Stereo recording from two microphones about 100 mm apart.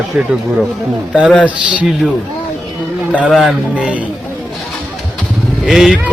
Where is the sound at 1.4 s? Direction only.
15° right (ahead or behind).